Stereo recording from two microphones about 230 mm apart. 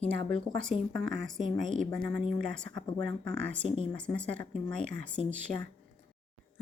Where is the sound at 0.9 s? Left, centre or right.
Right.